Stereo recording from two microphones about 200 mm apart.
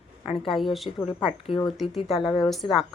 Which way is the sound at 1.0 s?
25° left (ahead or behind).